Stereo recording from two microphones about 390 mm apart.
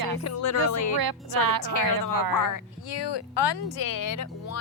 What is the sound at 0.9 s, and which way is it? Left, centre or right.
Speech, right.